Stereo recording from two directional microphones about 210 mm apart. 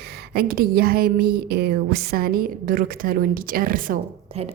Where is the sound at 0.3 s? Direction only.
45° right (ahead or behind).